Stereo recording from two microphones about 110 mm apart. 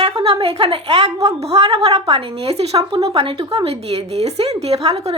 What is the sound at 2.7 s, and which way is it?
Speech, 35° right (ahead or behind).